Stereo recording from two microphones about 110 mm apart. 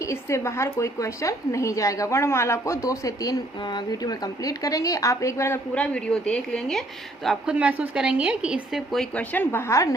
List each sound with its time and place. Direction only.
0.0 s a woman's voice: 25° left (ahead or behind)
5.7 s speech: 10° left (ahead or behind)
7.3 s speech: 10° right (ahead or behind)
9.1 s a woman's voice: 15° left (ahead or behind)